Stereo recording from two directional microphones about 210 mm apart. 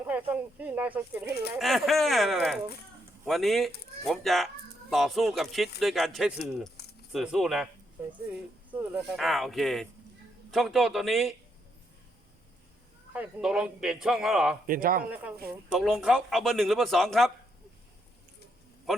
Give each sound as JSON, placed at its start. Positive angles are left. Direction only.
{"t": 0.0, "sound": "speech", "side_deg": -10}
{"t": 13.1, "sound": "speech", "side_deg": -5}
{"t": 14.7, "sound": "speech", "side_deg": -40}
{"t": 15.1, "sound": "speech", "side_deg": -5}